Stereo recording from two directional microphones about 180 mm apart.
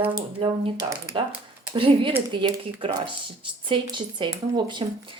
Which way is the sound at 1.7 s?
30° right (ahead or behind).